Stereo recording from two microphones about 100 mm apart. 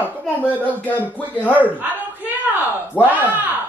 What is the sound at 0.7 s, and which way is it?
Speech, 15° left (ahead or behind).